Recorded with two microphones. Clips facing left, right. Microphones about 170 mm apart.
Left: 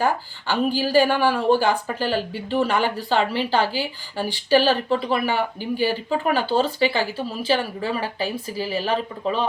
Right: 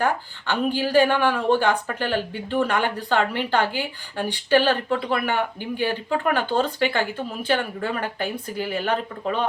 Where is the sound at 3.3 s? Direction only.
55° right (ahead or behind).